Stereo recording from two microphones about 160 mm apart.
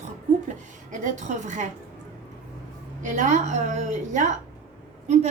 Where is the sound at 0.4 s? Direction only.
50° right (ahead or behind).